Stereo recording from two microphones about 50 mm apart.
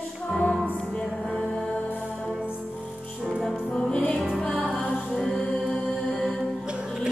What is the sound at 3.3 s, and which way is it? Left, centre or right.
Music, centre.